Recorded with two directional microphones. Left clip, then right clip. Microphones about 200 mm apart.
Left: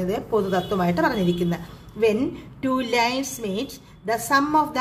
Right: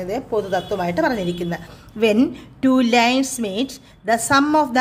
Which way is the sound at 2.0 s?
40° right (ahead or behind).